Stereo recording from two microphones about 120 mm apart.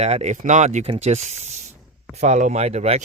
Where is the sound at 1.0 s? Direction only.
65° right (ahead or behind).